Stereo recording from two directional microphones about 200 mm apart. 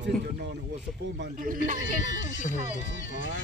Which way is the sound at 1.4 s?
40° right (ahead or behind).